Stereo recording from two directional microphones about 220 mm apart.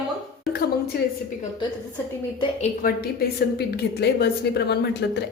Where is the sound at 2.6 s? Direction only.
40° left (ahead or behind).